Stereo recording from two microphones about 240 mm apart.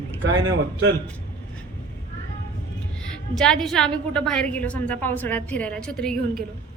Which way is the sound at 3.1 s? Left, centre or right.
Centre.